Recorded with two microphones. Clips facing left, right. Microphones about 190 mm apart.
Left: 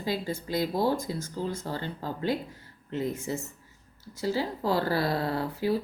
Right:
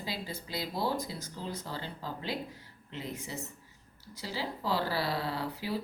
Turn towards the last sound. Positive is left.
turn(degrees=50)  # may be behind; listen again after turning